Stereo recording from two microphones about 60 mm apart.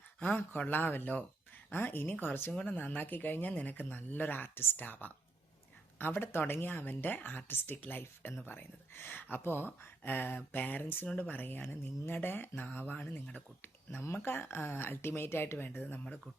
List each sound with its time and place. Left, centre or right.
0.7 s speech: left